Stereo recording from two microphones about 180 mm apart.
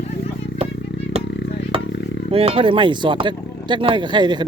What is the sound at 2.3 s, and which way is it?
Speech, 30° right (ahead or behind).